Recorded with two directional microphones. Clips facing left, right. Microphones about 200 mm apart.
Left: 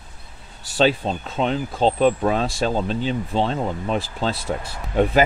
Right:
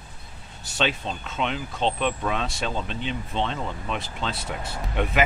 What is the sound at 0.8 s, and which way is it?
Speech, 35° left (ahead or behind).